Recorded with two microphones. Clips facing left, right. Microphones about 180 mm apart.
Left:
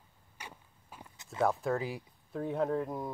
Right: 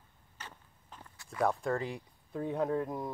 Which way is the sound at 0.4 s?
10° left (ahead or behind).